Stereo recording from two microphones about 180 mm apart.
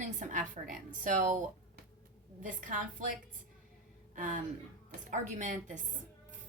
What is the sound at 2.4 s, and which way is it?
Speech, 45° right (ahead or behind).